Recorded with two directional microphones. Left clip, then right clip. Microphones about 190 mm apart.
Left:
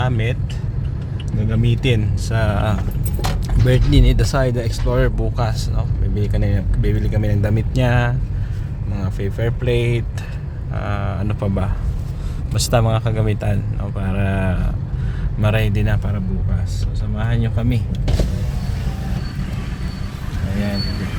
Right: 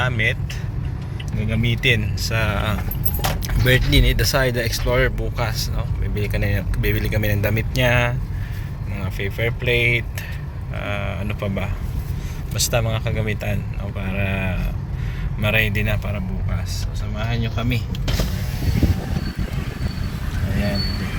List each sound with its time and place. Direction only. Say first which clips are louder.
0.0 s speech: right 3 dB; 25° left (ahead or behind)
1.6 s speech: right 4 dB; 30° left (ahead or behind)
17.2 s speech: left 1 dB; 20° left (ahead or behind)